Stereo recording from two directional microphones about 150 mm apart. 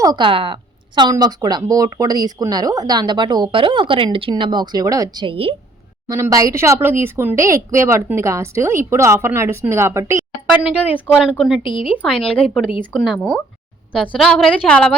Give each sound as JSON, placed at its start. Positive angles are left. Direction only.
{"t": 0.0, "sound": "a woman's voice", "side_deg": -30}
{"t": 5.2, "sound": "a woman's voice", "side_deg": -35}
{"t": 6.1, "sound": "speech", "side_deg": -20}
{"t": 11.1, "sound": "a woman's voice", "side_deg": -5}
{"t": 11.6, "sound": "speech", "side_deg": 35}
{"t": 12.0, "sound": "a woman's voice", "side_deg": 0}